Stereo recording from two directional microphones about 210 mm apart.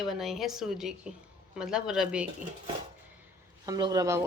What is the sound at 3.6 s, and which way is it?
Speech, 15° right (ahead or behind).